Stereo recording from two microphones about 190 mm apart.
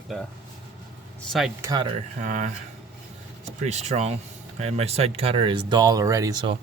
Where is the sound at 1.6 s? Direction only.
20° right (ahead or behind).